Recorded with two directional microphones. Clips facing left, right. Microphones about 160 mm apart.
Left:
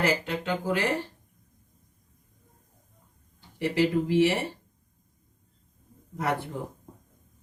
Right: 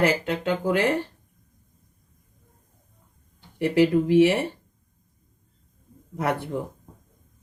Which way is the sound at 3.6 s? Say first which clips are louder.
Right 5 dB; 55° right (ahead or behind).